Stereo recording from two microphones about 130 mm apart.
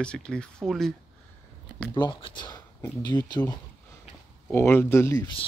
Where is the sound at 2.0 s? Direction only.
40° left (ahead or behind).